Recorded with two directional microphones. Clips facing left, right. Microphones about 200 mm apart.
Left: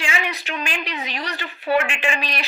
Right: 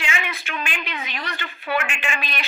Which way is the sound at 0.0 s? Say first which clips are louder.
Left 2 dB; 35° left (ahead or behind).